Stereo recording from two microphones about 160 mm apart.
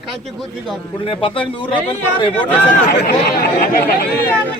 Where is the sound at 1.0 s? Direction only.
35° left (ahead or behind).